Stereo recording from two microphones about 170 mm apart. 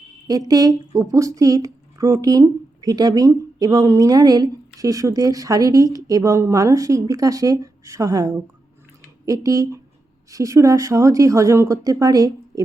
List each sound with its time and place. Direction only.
0.3 s speech: 20° right (ahead or behind)